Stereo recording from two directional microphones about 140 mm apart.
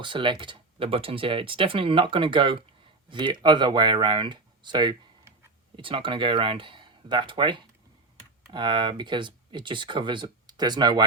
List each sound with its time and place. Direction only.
0.0 s speech: 35° right (ahead or behind)